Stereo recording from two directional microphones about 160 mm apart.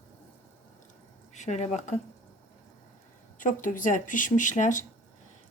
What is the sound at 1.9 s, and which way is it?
Speech, 45° left (ahead or behind).